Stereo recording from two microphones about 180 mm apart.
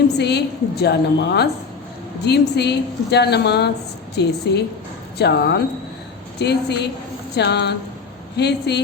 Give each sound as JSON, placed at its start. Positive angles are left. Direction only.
{"t": 0.2, "sound": "a woman's voice", "side_deg": 70}